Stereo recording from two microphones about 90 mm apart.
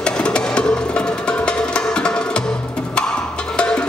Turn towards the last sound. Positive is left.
turn(degrees=10)  # may be behind; listen again after turning